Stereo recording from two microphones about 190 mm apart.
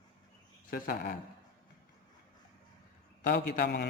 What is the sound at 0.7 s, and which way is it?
Speech, 50° left (ahead or behind).